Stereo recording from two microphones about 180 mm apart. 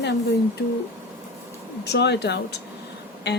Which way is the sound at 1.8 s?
70° left (ahead or behind).